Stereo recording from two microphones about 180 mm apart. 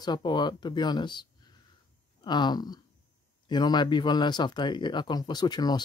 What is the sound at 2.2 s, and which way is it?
Speech, 25° left (ahead or behind).